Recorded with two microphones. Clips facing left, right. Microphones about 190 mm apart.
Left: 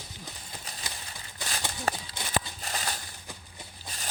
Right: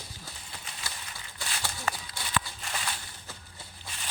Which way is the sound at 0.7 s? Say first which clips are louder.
Left 2 dB; 40° left (ahead or behind).